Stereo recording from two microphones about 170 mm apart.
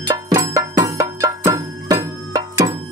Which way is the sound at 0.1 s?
20° right (ahead or behind).